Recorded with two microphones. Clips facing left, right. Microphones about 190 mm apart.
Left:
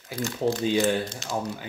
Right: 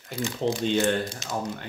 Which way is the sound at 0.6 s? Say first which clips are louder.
Even; 5° left (ahead or behind).